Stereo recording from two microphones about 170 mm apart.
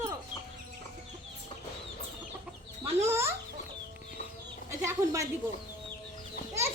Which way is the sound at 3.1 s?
15° right (ahead or behind).